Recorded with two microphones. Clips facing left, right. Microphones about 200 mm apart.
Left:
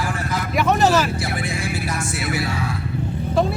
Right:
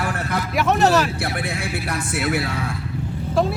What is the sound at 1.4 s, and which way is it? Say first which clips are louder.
Speech: left 1 dB; 60° right (ahead or behind).